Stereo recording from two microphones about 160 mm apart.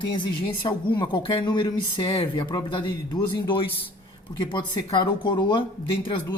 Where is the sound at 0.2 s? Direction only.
30° left (ahead or behind).